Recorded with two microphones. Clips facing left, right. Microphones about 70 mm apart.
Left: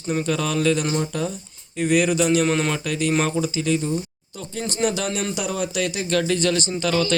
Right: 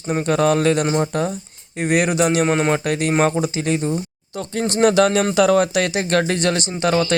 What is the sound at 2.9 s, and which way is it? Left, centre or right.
Speech, right.